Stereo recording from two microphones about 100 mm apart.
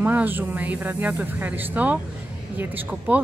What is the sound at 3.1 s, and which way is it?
Speech, 15° right (ahead or behind).